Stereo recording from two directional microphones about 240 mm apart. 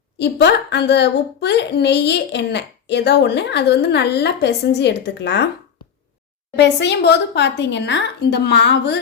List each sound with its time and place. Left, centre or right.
0.2 s a woman's voice: left
6.6 s a woman's voice: left